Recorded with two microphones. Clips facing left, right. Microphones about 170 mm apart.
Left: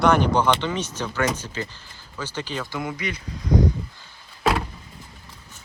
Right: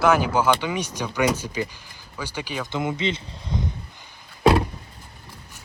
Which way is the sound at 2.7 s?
20° right (ahead or behind).